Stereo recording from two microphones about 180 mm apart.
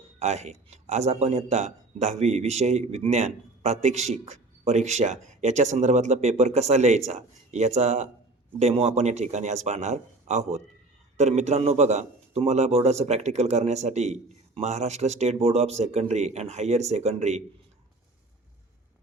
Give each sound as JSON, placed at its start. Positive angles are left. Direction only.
{"t": 0.2, "sound": "speech", "side_deg": -40}